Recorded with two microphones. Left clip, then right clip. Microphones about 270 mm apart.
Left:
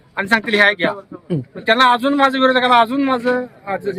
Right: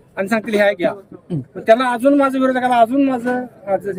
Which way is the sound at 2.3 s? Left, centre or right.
Right.